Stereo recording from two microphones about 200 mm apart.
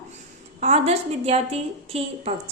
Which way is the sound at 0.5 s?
30° right (ahead or behind).